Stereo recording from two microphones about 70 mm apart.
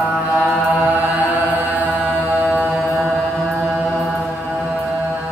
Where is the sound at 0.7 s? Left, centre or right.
Right.